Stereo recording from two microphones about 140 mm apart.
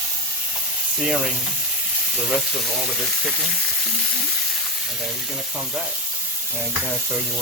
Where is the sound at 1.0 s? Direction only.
5° right (ahead or behind).